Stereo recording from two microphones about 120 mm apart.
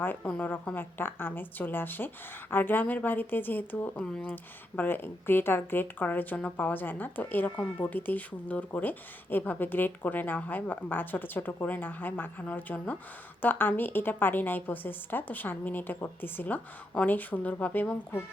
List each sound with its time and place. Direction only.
0.0 s speech: 15° left (ahead or behind)